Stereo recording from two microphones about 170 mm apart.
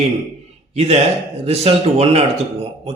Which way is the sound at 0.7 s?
40° right (ahead or behind).